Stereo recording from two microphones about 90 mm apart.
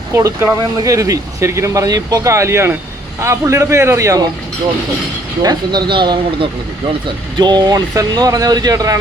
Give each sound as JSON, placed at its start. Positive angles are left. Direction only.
{"t": 0.1, "sound": "speech", "side_deg": -30}
{"t": 5.4, "sound": "speech", "side_deg": -50}